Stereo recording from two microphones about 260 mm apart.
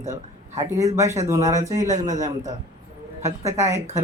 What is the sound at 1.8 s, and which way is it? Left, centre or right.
Speech, right.